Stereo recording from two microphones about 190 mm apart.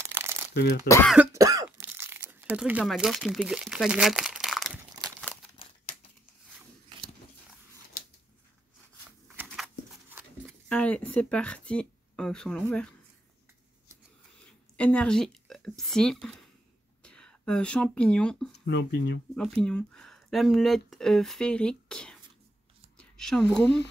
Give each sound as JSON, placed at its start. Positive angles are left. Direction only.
{"t": 0.0, "sound": "shuffling cards", "side_deg": -10}
{"t": 1.0, "sound": "cough", "side_deg": -10}
{"t": 9.4, "sound": "a sound", "side_deg": -10}
{"t": 10.7, "sound": "speech", "side_deg": 5}
{"t": 14.8, "sound": "speech", "side_deg": 5}
{"t": 18.5, "sound": "speech", "side_deg": 65}
{"t": 19.3, "sound": "speech", "side_deg": 5}
{"t": 22.9, "sound": "a sound", "side_deg": 5}